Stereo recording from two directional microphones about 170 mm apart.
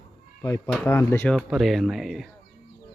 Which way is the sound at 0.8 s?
15° left (ahead or behind).